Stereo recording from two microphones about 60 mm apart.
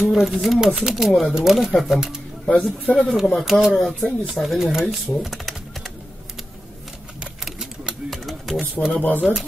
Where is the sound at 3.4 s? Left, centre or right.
Centre.